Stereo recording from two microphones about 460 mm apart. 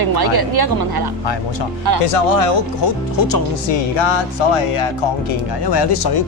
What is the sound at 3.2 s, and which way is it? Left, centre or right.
Speech, left.